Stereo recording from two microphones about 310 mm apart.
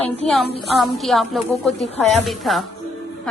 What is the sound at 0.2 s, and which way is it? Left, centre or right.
A woman's voice, centre.